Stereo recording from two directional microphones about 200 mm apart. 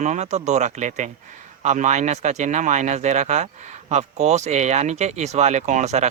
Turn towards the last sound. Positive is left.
turn(degrees=-35)  # may be behind; listen again after turning